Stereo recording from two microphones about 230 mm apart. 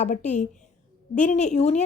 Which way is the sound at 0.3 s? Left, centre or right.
Left.